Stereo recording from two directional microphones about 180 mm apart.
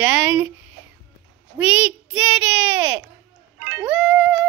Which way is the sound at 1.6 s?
10° right (ahead or behind).